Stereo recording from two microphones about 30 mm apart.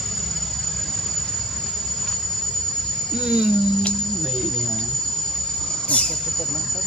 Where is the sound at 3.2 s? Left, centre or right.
Right.